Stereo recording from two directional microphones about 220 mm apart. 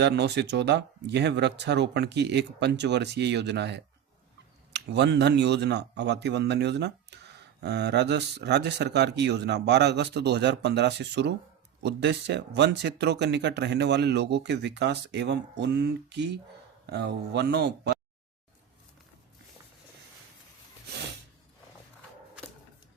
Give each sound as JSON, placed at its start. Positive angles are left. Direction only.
{"t": 0.0, "sound": "speech", "side_deg": -50}